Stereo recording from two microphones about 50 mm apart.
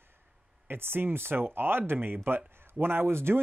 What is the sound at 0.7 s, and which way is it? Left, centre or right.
Speech, right.